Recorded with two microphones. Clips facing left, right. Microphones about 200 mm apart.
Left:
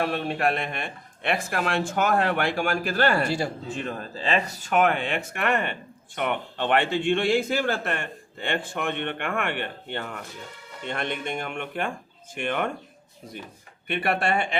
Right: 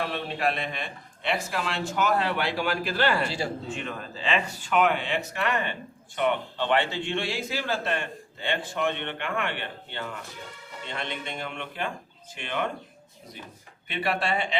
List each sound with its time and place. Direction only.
0.0 s a man's voice: 50° left (ahead or behind)
13.8 s a man's voice: 55° left (ahead or behind)